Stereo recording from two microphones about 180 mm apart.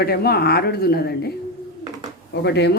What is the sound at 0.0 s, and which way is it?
Speech, 60° left (ahead or behind).